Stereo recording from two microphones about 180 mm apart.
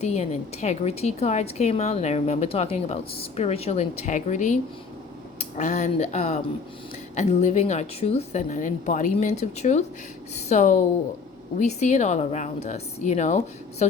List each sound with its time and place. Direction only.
0.0 s a woman's voice: 35° left (ahead or behind)